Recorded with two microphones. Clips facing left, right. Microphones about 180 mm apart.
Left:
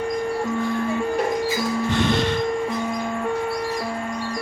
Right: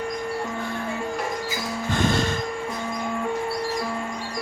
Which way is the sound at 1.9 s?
45° right (ahead or behind).